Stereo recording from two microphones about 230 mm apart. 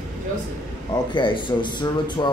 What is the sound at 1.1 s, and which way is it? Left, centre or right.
A man's voice, left.